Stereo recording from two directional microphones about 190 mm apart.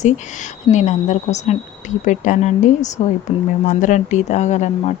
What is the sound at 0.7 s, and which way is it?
Speech, 40° left (ahead or behind).